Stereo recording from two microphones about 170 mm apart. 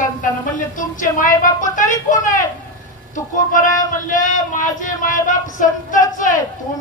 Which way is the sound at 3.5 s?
50° left (ahead or behind).